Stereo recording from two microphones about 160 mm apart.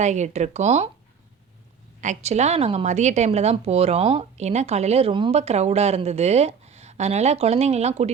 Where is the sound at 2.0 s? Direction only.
45° right (ahead or behind).